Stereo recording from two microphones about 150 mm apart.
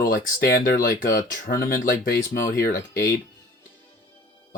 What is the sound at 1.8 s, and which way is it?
Speech, 90° left.